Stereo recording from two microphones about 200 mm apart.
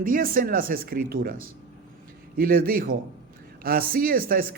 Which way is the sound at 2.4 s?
45° right (ahead or behind).